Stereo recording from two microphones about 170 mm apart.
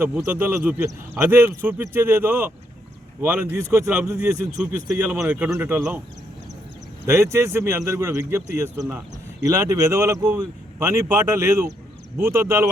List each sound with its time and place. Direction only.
0.3 s speech: 10° right (ahead or behind)
7.0 s speech: 15° right (ahead or behind)